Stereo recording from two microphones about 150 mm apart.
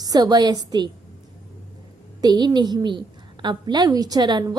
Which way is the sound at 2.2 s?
30° right (ahead or behind).